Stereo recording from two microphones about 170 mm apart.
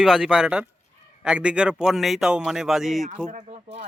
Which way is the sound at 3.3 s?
45° right (ahead or behind).